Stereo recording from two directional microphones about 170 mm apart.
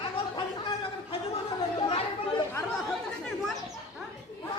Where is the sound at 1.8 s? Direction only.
35° left (ahead or behind).